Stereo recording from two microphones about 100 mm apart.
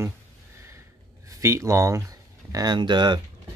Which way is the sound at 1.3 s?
30° right (ahead or behind).